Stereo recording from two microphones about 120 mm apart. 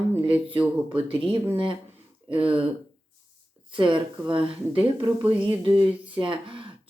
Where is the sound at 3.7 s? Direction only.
45° right (ahead or behind).